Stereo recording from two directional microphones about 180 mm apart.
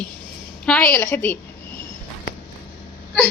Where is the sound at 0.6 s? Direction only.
5° left (ahead or behind).